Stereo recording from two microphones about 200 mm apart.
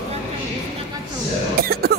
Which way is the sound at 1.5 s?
50° right (ahead or behind).